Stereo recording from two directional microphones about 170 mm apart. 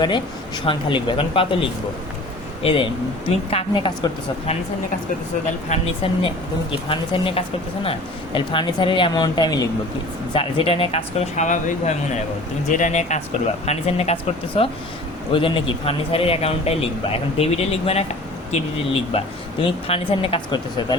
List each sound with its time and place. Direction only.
0.0 s speech: 25° left (ahead or behind)
5.6 s speech: 40° left (ahead or behind)